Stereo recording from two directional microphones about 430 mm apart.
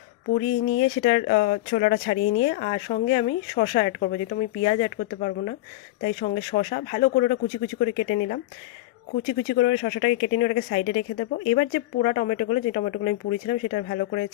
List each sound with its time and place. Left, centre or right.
0.8 s speech: centre